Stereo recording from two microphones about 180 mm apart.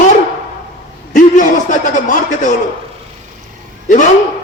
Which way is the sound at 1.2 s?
45° left (ahead or behind).